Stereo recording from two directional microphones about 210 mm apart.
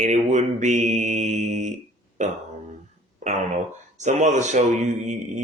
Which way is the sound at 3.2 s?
35° right (ahead or behind).